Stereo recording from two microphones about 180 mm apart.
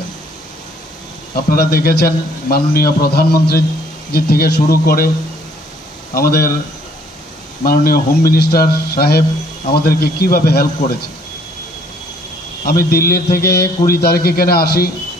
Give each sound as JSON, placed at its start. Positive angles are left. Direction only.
{"t": 1.3, "sound": "a man's voice", "side_deg": 55}
{"t": 6.1, "sound": "a man's voice", "side_deg": 55}
{"t": 7.6, "sound": "a man's voice", "side_deg": 55}
{"t": 12.6, "sound": "a man's voice", "side_deg": 55}